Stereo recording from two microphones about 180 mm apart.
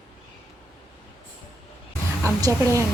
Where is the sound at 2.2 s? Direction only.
20° right (ahead or behind).